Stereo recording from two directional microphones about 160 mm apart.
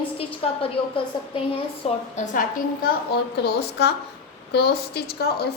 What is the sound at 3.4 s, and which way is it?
A woman's voice, 90° left.